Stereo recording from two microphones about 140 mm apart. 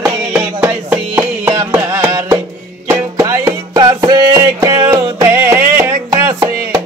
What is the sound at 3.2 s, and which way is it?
Music, 20° right (ahead or behind).